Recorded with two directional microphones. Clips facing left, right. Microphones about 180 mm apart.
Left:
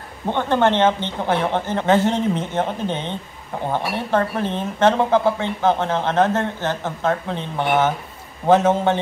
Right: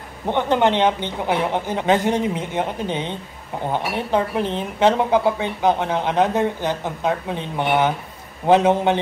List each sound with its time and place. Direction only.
0.3 s speech: 15° right (ahead or behind)